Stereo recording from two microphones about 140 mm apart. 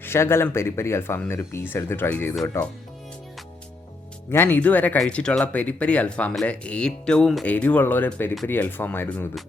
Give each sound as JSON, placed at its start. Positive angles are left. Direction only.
{"t": 0.0, "sound": "speech", "side_deg": 15}
{"t": 4.3, "sound": "speech", "side_deg": 15}